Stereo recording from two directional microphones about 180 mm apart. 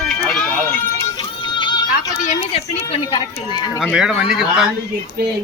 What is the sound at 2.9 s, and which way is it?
Speech, 25° left (ahead or behind).